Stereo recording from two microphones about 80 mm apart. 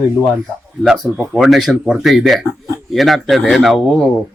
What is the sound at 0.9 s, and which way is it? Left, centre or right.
Speech, centre.